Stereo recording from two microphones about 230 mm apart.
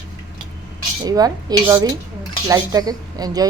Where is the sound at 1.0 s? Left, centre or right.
Centre.